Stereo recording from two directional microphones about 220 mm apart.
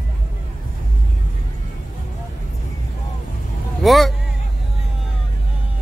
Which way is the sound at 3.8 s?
Centre (ahead or behind).